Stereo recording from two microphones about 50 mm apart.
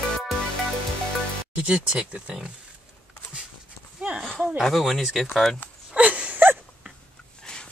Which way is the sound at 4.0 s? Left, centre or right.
Right.